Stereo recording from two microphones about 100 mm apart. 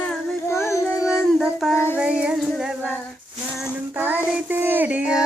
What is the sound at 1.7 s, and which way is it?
Child singing, 25° left (ahead or behind).